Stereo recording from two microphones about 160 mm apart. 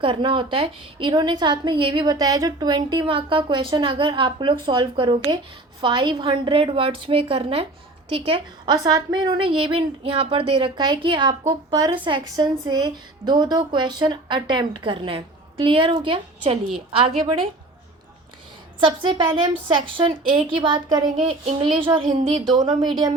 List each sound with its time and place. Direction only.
0.0 s a woman's voice: 30° right (ahead or behind)
18.8 s a woman's voice: 30° right (ahead or behind)